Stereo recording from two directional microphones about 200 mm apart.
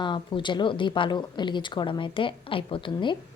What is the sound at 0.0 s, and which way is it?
Speech, 25° left (ahead or behind).